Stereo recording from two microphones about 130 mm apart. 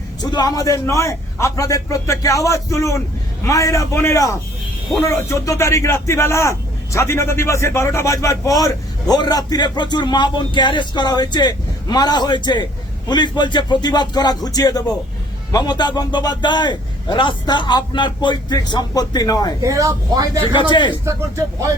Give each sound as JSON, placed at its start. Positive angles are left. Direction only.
{"t": 0.2, "sound": "a man's voice", "side_deg": 30}
{"t": 19.6, "sound": "speech", "side_deg": -25}
{"t": 20.4, "sound": "a man's voice", "side_deg": 35}
{"t": 21.0, "sound": "speech", "side_deg": -20}